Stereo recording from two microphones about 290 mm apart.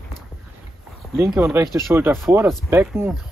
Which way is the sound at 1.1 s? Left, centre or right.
Centre.